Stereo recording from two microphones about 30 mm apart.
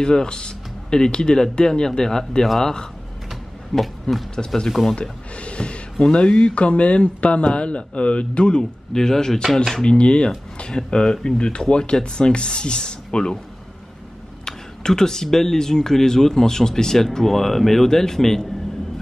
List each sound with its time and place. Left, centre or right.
0.0 s speech: left
3.7 s roaring cats: centre
4.6 s speech: centre
5.4 s a sound: left
6.1 s speech: left
8.9 s speech: centre
9.8 s speech: left
10.7 s speech: left
14.4 s a sound: centre
15.2 s speech: centre